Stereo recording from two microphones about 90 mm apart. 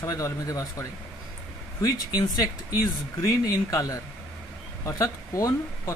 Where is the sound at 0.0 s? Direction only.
40° left (ahead or behind).